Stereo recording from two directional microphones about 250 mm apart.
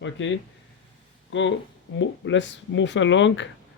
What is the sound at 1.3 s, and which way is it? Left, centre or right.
Speech, left.